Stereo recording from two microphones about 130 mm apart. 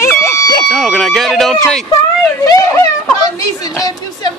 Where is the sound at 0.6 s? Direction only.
Centre (ahead or behind).